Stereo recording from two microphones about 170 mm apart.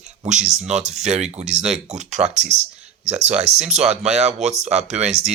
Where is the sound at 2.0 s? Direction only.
45° right (ahead or behind).